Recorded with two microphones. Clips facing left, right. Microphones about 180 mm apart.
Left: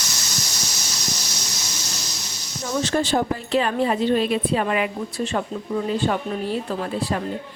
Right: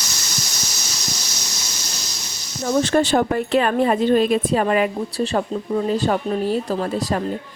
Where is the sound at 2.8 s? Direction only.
65° right (ahead or behind).